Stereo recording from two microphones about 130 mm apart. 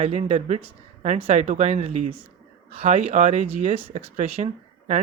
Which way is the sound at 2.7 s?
50° right (ahead or behind).